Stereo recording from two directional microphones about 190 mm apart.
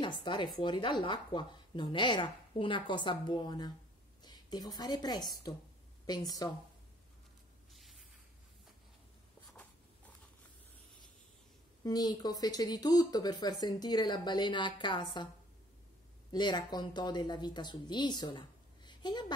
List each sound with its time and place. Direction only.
0.0 s a woman's voice: 25° left (ahead or behind)
7.7 s a sound: centre (ahead or behind)
9.5 s writing: 10° left (ahead or behind)
11.8 s speech: 20° left (ahead or behind)
16.3 s speech: 25° left (ahead or behind)
18.9 s a sound: 20° left (ahead or behind)